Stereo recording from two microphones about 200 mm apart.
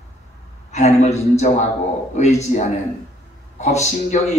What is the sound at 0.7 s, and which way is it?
Speech, 35° left (ahead or behind).